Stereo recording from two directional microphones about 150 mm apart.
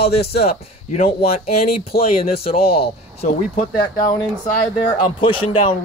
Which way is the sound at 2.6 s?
40° left (ahead or behind).